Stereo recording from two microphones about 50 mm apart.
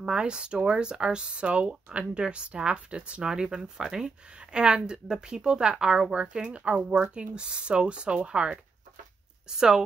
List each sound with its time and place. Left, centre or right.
0.0 s speech: centre